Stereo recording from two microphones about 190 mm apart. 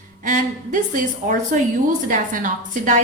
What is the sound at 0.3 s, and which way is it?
A woman's voice, 45° right (ahead or behind).